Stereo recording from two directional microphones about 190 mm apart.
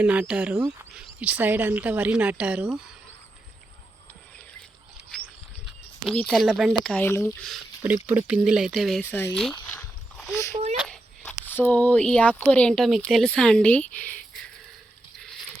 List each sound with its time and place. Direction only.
0.0 s speech: 10° right (ahead or behind)
6.2 s speech: centre (ahead or behind)
7.9 s speech: 10° right (ahead or behind)
9.3 s zipper: 5° left (ahead or behind)
10.5 s a sound: 35° right (ahead or behind)
10.8 s a sound: centre (ahead or behind)
11.4 s speech: 10° left (ahead or behind)